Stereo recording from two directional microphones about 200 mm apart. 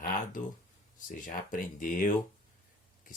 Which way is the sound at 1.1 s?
40° left (ahead or behind).